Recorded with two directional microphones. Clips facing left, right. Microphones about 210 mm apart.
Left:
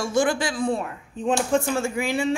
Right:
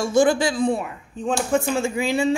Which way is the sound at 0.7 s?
5° right (ahead or behind).